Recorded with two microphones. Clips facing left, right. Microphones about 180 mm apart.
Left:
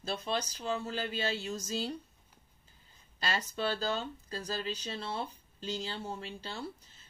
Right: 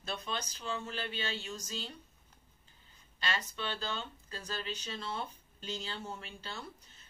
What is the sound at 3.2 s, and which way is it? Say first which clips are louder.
Speech: left 4 dB; 40° left (ahead or behind).